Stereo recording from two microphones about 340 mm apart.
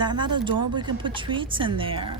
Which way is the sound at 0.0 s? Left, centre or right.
Centre.